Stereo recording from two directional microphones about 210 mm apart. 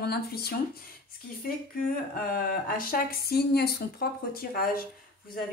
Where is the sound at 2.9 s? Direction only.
45° left (ahead or behind).